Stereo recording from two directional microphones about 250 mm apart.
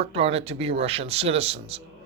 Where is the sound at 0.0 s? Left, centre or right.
Right.